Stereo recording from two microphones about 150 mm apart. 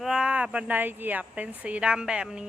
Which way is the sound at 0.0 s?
5° right (ahead or behind).